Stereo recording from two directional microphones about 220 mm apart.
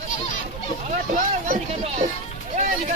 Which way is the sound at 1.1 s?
35° right (ahead or behind).